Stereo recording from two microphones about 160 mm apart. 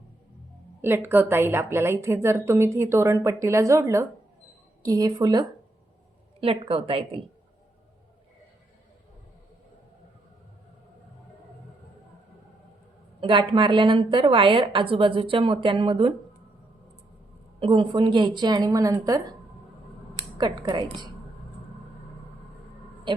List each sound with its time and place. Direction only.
0.8 s a woman's voice: 15° right (ahead or behind)
6.4 s a woman's voice: 35° right (ahead or behind)
13.1 s a woman's voice: 30° right (ahead or behind)
17.6 s speech: 30° right (ahead or behind)
20.4 s speech: 25° right (ahead or behind)